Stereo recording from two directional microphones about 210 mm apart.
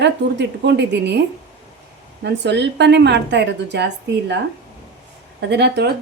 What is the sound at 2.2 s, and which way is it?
A woman's voice, 55° right (ahead or behind).